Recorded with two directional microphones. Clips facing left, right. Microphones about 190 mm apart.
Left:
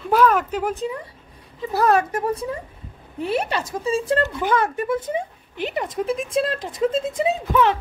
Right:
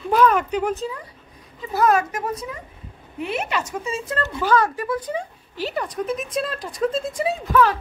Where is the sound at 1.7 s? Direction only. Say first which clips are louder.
Left 1 dB; 35° left (ahead or behind).